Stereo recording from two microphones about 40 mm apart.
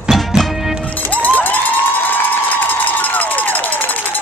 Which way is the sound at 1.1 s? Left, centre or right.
Left.